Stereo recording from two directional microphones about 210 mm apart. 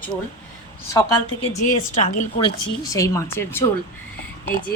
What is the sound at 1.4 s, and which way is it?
Speech, 35° left (ahead or behind).